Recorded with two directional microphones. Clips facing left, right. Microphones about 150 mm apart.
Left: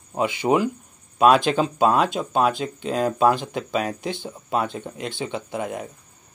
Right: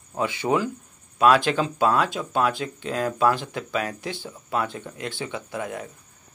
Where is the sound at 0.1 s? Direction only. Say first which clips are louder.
Left 3 dB; 15° left (ahead or behind).